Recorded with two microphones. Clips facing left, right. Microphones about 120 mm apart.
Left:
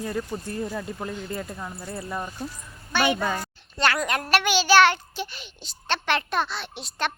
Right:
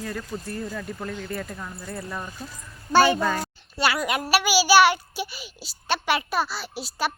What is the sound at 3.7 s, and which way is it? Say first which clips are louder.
A child's voice: even; 5° right (ahead or behind).